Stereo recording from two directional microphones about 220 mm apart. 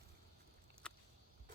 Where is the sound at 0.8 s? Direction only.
5° left (ahead or behind).